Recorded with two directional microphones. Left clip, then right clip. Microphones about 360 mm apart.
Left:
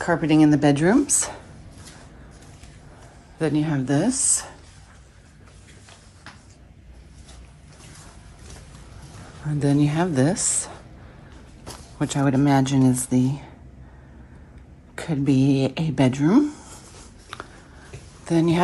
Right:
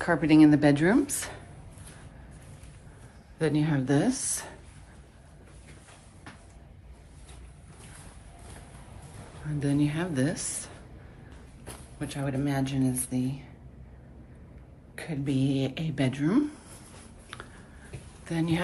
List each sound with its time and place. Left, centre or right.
0.0 s speech: centre
3.3 s speech: centre
9.6 s speech: centre
12.0 s speech: centre
15.0 s speech: centre
17.3 s a sound: centre
18.2 s speech: centre